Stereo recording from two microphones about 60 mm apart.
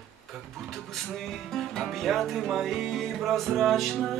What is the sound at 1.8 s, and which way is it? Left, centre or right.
Music, centre.